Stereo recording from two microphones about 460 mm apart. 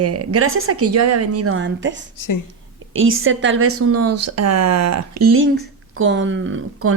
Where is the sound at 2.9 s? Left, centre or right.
Right.